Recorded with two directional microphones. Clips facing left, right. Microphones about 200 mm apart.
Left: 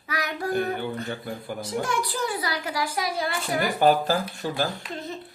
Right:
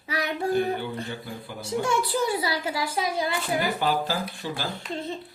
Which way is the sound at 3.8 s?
45° left (ahead or behind).